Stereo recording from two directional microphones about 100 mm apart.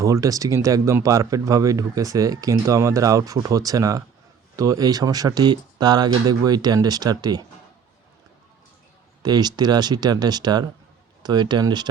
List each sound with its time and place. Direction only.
0.0 s speech: 35° right (ahead or behind)
9.2 s speech: 45° right (ahead or behind)